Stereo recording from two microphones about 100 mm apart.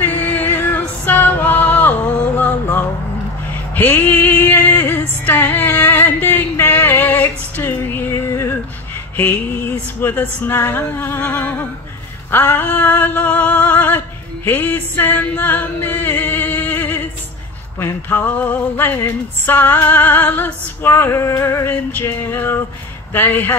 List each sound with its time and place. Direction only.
0.0 s music: 20° left (ahead or behind)
9.1 s a sound: 20° left (ahead or behind)
17.7 s music: 20° left (ahead or behind)